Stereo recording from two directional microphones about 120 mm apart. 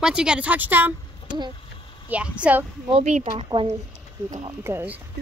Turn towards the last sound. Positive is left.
turn(degrees=-15)  # may be behind; listen again after turning